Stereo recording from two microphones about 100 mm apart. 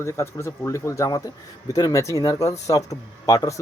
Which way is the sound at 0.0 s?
30° left (ahead or behind).